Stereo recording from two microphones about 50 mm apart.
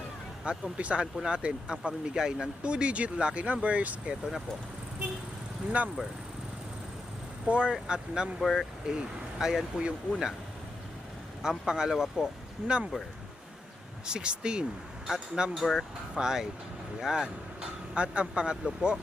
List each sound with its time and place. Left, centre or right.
0.4 s speech: right
5.8 s speech: right
7.4 s speech: right
8.4 s speech: centre
8.9 s speech: centre
11.4 s speech: centre
12.6 s speech: centre
14.1 s speech: centre
17.9 s speech: right